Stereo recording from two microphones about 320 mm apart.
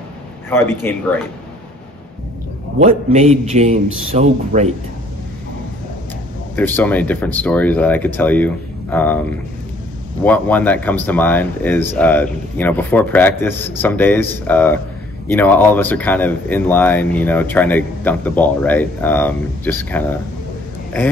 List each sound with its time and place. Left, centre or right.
0.5 s a man's voice: centre
2.8 s a man's voice: right
6.5 s speech: centre
10.2 s speech: centre